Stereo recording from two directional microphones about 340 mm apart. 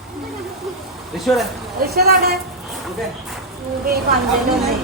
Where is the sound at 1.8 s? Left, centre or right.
Right.